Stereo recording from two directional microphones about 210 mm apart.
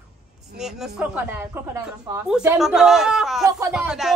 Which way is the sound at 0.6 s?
Centre (ahead or behind).